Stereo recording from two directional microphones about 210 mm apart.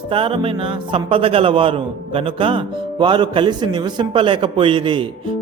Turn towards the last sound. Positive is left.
turn(degrees=-25)  # may be behind; listen again after turning